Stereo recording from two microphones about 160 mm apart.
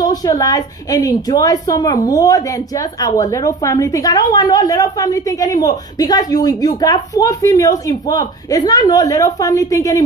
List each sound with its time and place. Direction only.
0.0 s a woman's voice: 25° left (ahead or behind)